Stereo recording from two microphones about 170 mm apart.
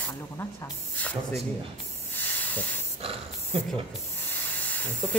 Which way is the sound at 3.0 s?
35° right (ahead or behind).